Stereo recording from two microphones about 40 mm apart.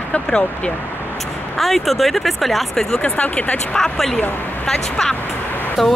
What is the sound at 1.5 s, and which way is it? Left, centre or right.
A woman's voice, centre.